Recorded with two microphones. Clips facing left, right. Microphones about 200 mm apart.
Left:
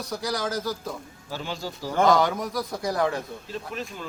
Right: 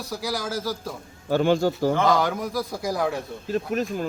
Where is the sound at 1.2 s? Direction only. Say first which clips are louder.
Right 14 dB; 60° right (ahead or behind).